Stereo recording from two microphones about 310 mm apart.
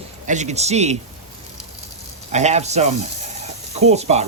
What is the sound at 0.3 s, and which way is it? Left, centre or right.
Speech, right.